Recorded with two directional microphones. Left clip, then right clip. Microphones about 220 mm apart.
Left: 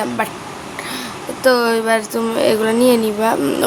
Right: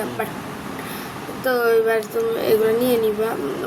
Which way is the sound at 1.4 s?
45° left (ahead or behind).